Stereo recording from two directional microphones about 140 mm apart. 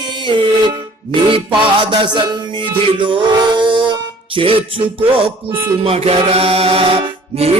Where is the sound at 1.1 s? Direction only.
40° right (ahead or behind).